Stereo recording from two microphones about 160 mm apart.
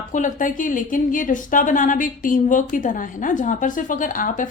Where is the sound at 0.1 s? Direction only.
55° left (ahead or behind).